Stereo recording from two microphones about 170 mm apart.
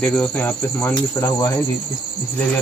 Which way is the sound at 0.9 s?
20° left (ahead or behind).